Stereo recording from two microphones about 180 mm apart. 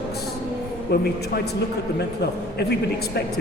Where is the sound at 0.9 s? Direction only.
65° left (ahead or behind).